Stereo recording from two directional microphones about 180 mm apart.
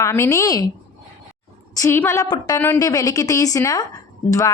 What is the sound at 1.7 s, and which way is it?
A woman's voice, 15° left (ahead or behind).